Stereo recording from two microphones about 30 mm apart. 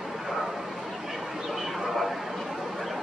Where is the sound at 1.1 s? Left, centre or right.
Centre.